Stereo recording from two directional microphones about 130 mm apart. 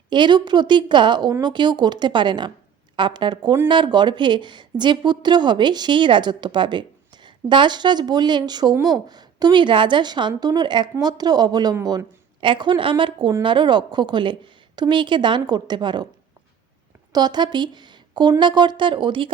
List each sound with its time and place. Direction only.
0.1 s a woman's voice: 35° right (ahead or behind)
17.1 s a woman's voice: 30° right (ahead or behind)